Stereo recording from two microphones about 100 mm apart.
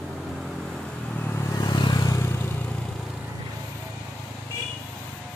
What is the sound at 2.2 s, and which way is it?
Vehicle, 25° left (ahead or behind).